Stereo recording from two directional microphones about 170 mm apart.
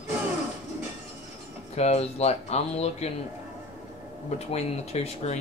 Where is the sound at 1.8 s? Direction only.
40° left (ahead or behind).